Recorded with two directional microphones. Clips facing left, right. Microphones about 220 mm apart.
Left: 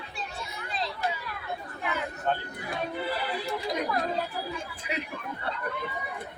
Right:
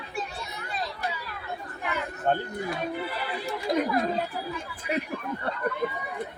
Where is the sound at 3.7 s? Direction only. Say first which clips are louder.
Right 7 dB; 55° right (ahead or behind).